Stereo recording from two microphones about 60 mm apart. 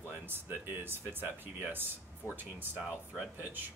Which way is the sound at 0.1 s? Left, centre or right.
Right.